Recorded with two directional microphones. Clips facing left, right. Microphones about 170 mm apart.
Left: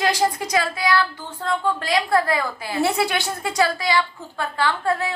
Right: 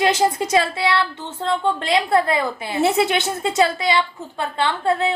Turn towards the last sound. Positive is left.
turn(degrees=-25)  # may be behind; listen again after turning